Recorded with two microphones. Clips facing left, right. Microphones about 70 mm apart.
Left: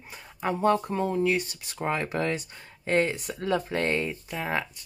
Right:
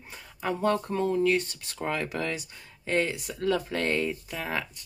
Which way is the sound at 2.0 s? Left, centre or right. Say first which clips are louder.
Left 3 dB; left.